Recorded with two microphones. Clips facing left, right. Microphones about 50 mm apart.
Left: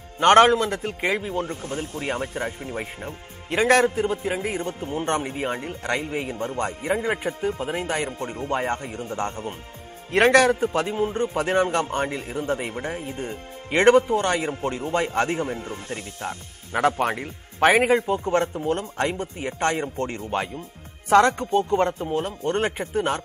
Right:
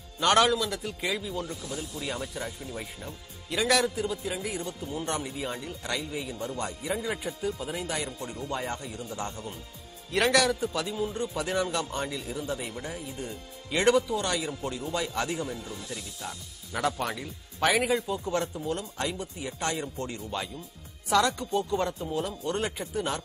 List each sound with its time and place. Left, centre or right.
0.2 s a man's voice: left